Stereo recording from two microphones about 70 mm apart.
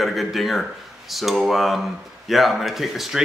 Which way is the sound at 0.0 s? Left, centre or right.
Centre.